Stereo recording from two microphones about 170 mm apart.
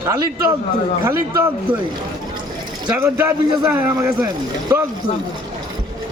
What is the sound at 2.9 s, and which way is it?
A man's voice, 15° right (ahead or behind).